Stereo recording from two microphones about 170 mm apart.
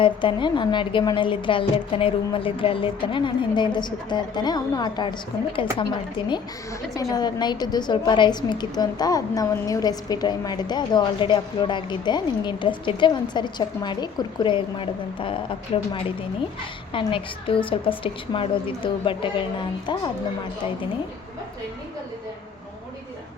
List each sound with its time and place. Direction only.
0.0 s a woman's voice: 30° left (ahead or behind)